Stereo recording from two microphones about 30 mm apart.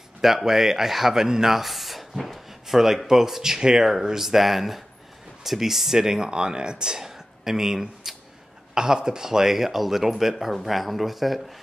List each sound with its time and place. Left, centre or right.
0.2 s speech: centre
1.5 s speech: centre; by 7.0 s right
7.0 s speech: centre
8.7 s speech: right; by 11.4 s centre